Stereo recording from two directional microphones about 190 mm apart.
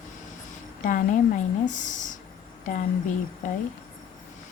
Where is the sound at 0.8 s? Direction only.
45° left (ahead or behind).